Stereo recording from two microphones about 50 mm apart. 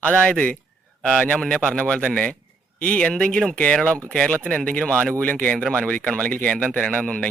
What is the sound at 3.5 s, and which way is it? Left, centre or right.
A man's voice, left.